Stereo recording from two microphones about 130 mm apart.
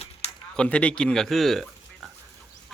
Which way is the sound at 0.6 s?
10° left (ahead or behind).